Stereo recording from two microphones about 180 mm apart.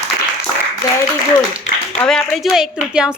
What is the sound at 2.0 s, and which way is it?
Speech, 5° left (ahead or behind).